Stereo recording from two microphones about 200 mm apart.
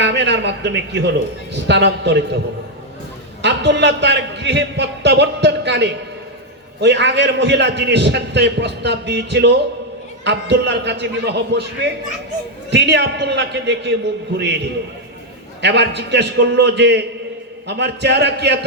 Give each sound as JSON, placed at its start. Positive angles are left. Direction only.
{"t": 0.0, "sound": "a man's voice", "side_deg": -60}
{"t": 3.4, "sound": "a man's voice", "side_deg": -60}
{"t": 15.6, "sound": "a man's voice", "side_deg": -60}